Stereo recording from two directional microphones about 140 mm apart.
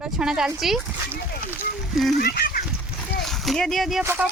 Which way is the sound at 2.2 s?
90° left.